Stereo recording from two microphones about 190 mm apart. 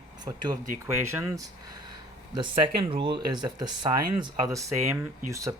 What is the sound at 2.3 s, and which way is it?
Speech, 25° right (ahead or behind).